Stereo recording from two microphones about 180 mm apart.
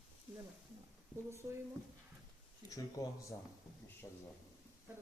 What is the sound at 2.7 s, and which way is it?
Speech, 20° left (ahead or behind).